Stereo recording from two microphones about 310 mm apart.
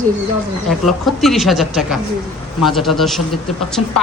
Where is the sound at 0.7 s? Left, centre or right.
Centre.